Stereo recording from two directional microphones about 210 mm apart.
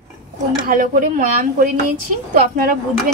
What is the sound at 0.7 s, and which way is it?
A woman's voice, 40° right (ahead or behind).